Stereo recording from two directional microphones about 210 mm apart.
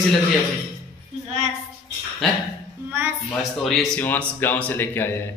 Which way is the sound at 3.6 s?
Centre (ahead or behind).